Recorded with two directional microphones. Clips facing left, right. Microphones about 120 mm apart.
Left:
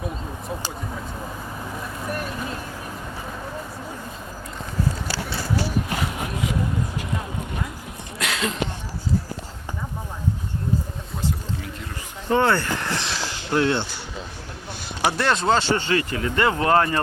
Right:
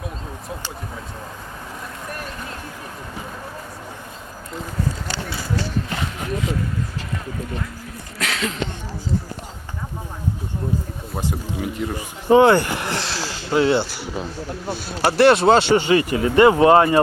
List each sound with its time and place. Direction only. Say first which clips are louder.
8.2 s speech: right 1 dB; centre (ahead or behind)
11.3 s speech: right 4 dB; 15° right (ahead or behind)
15.1 s speech: right 9 dB; 70° right (ahead or behind)
15.7 s speech: right 6 dB; 15° right (ahead or behind)